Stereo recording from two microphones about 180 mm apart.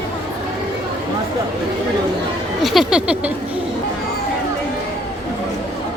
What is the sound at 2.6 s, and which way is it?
Speech, centre (ahead or behind).